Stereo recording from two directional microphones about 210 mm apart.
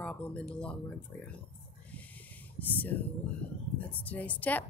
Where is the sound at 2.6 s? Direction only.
10° left (ahead or behind).